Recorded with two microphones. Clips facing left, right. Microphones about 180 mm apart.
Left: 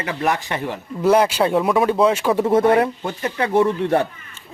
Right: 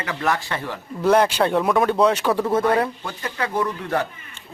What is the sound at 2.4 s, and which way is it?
Speech, 25° left (ahead or behind).